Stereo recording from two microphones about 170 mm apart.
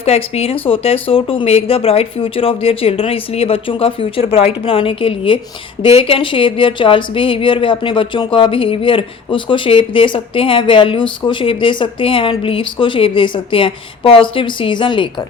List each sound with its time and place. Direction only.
0.0 s speech: 35° left (ahead or behind)